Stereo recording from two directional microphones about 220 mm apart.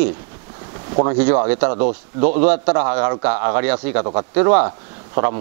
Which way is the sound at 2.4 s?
10° right (ahead or behind).